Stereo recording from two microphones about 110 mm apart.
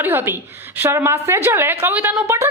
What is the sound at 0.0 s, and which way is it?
A woman's voice, 20° right (ahead or behind).